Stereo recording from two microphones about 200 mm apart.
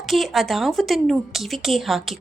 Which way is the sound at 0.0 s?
Centre (ahead or behind).